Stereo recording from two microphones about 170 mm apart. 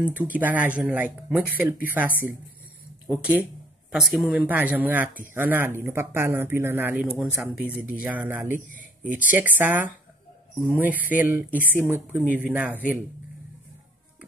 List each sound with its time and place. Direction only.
0.1 s speech: 10° right (ahead or behind)
8.5 s a man's voice: 50° left (ahead or behind)
9.3 s speech: 10° right (ahead or behind)